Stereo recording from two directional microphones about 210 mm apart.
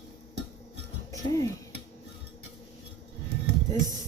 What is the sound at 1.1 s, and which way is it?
Speech, 15° left (ahead or behind).